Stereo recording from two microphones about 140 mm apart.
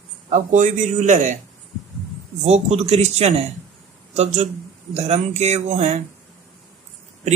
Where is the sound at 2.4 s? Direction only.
50° right (ahead or behind).